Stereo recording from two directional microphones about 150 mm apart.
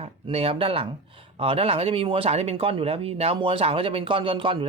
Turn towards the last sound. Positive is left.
turn(degrees=-35)  # may be behind; listen again after turning